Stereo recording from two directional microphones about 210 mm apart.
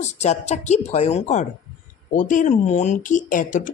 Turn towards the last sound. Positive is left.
turn(degrees=40)  # may be behind; listen again after turning